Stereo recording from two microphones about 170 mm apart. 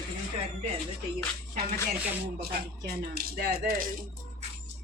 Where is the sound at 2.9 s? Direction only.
65° right (ahead or behind).